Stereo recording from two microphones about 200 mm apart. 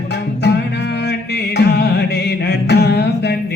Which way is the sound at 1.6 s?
55° left (ahead or behind).